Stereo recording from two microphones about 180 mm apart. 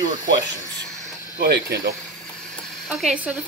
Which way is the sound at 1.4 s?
65° right (ahead or behind).